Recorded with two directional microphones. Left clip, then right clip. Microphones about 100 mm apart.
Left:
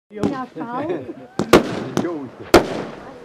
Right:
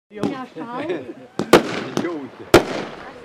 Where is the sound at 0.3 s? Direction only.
20° right (ahead or behind).